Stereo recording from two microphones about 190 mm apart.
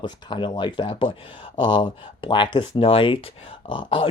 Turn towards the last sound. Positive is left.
turn(degrees=25)  # may be behind; listen again after turning